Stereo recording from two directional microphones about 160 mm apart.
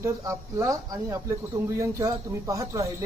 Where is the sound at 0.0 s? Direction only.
20° right (ahead or behind).